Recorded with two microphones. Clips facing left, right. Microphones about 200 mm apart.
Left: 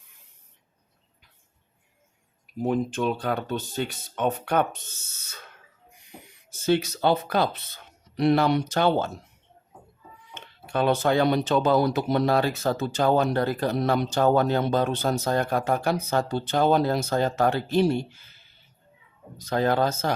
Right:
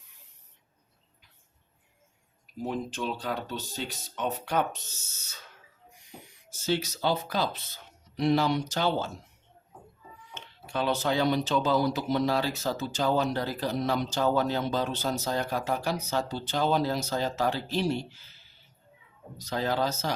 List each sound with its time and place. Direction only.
2.6 s speech: 55° left (ahead or behind)
10.3 s speech: 55° left (ahead or behind)
19.4 s speech: 55° left (ahead or behind)